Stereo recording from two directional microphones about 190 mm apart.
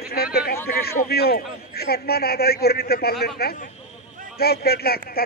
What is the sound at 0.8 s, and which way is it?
A man's voice, 55° left (ahead or behind).